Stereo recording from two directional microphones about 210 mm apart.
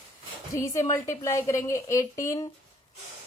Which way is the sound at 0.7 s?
15° left (ahead or behind).